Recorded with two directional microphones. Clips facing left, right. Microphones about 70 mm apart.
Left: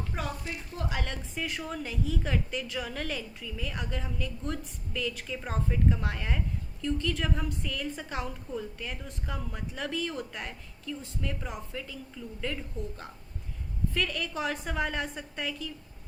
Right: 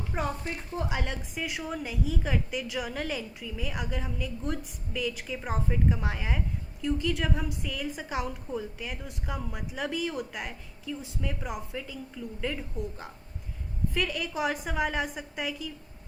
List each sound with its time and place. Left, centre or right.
0.1 s speech: right
0.4 s a woman's voice: right
0.8 s a woman's voice: centre